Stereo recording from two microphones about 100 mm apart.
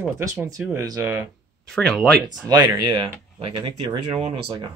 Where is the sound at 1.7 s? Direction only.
5° left (ahead or behind).